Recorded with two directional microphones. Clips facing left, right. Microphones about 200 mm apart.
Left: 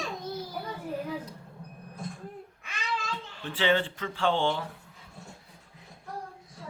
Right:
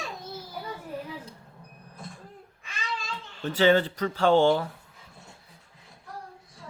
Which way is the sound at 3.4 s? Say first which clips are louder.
Right 5 dB; 40° right (ahead or behind).